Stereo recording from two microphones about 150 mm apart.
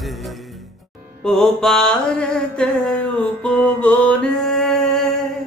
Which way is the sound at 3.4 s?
10° left (ahead or behind).